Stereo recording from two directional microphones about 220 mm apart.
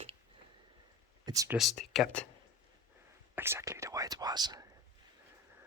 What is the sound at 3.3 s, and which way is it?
Speech, 10° right (ahead or behind).